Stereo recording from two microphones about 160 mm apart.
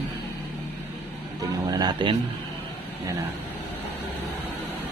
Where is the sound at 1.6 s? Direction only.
25° right (ahead or behind).